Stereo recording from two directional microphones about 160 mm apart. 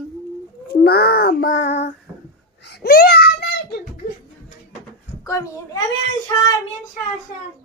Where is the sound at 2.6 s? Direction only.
90° left.